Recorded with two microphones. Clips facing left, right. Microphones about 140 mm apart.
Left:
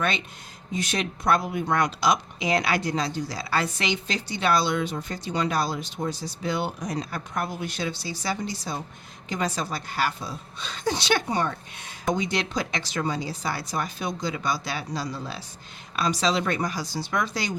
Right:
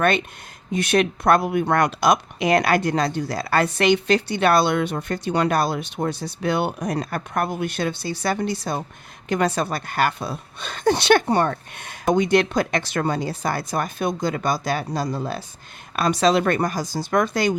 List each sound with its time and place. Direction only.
0.7 s speech: 65° right (ahead or behind)